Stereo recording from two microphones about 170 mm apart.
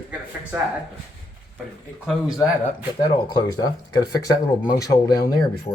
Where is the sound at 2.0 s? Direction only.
Centre (ahead or behind).